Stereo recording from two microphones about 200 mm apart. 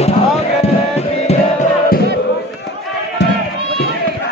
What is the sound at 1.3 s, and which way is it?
Music, 35° left (ahead or behind).